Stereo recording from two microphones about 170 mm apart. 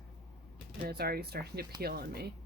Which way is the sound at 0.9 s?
65° right (ahead or behind).